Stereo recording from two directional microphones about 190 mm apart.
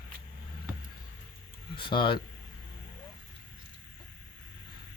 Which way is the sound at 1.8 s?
25° left (ahead or behind).